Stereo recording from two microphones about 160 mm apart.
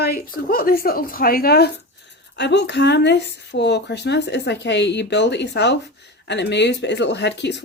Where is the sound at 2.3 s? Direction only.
90° left.